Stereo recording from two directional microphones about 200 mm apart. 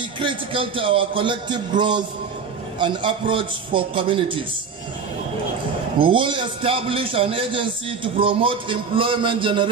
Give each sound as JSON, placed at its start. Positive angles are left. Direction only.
{"t": 0.2, "sound": "a man's voice", "side_deg": -25}
{"t": 5.9, "sound": "a man's voice", "side_deg": -25}